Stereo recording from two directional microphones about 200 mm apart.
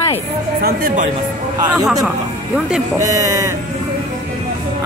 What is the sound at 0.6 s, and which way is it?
Speech, 45° right (ahead or behind).